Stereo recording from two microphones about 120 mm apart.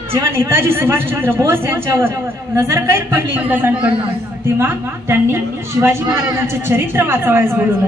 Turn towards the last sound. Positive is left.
turn(degrees=-20)  # may be behind; listen again after turning